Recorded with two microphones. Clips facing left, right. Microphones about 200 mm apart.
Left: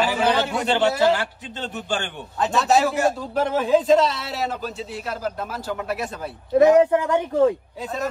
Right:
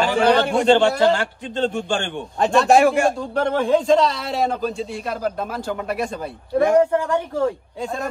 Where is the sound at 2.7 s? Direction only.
60° right (ahead or behind).